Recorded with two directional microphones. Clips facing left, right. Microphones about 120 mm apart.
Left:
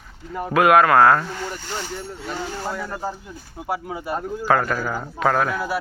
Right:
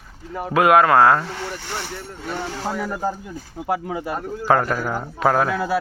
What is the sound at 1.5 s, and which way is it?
Speech, 70° right (ahead or behind).